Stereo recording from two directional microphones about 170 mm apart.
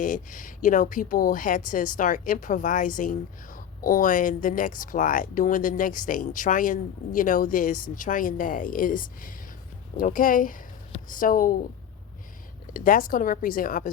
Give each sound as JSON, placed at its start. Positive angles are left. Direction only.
{"t": 0.0, "sound": "a woman's voice", "side_deg": 50}
{"t": 12.7, "sound": "a woman's voice", "side_deg": 55}